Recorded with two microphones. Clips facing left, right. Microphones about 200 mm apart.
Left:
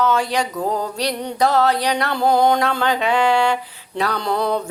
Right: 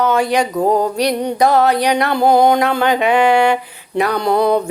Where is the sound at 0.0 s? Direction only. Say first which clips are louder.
Right 4 dB; 15° right (ahead or behind).